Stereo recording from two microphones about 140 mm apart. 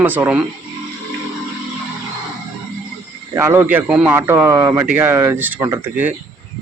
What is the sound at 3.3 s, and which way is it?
Speech, 20° right (ahead or behind).